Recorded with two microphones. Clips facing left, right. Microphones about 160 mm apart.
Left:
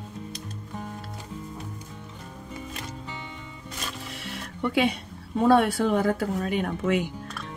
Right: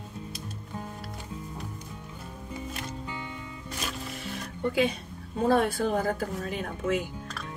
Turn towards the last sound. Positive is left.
turn(degrees=70)  # may be behind; listen again after turning